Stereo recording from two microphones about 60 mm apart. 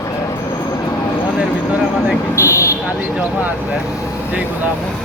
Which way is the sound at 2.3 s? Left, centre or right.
Left.